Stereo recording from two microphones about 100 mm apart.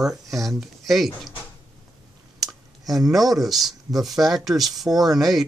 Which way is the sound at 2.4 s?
Centre (ahead or behind).